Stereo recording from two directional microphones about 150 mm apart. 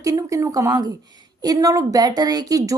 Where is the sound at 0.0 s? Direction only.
20° right (ahead or behind).